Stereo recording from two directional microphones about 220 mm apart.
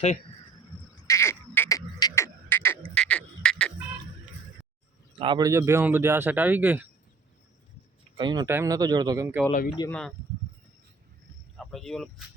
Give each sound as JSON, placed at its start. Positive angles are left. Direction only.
{"t": 1.0, "sound": "frog", "side_deg": 10}
{"t": 5.2, "sound": "speech", "side_deg": -20}
{"t": 8.2, "sound": "speech", "side_deg": -20}
{"t": 9.5, "sound": "speech", "side_deg": 40}
{"t": 11.5, "sound": "speech", "side_deg": 0}